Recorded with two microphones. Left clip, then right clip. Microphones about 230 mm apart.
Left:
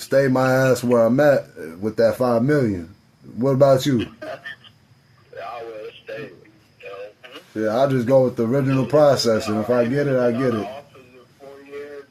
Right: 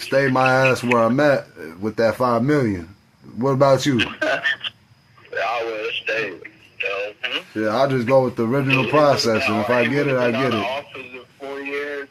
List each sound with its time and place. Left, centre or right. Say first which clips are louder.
0.0 s speech: right 1 dB; centre
3.9 s speech: right 6 dB; right
5.3 s a sound: right 9 dB; right
7.5 s speech: left 1 dB; centre
9.4 s speech: right 3 dB; right
9.9 s speech: even; centre
10.3 s speech: right 2 dB; right
11.4 s radio: right 9 dB; right